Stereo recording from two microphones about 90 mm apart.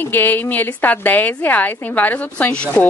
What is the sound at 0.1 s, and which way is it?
A woman's voice, 20° left (ahead or behind).